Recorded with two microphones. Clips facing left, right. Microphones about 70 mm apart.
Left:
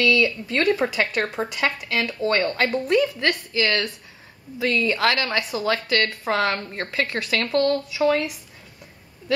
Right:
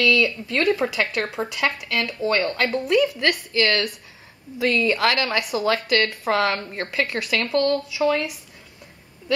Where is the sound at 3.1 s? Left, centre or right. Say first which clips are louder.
Right 1 dB; centre.